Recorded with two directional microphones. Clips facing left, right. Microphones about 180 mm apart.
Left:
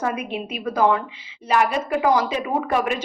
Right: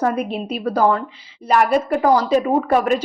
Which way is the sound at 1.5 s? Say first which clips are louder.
Right 4 dB; 40° right (ahead or behind).